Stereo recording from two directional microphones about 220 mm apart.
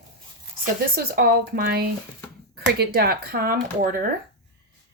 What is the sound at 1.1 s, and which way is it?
Speech, 45° right (ahead or behind).